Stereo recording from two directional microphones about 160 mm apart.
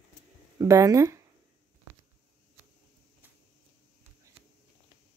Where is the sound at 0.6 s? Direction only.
20° right (ahead or behind).